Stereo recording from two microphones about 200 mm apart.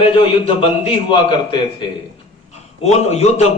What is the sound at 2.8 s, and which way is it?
Speech, 35° left (ahead or behind).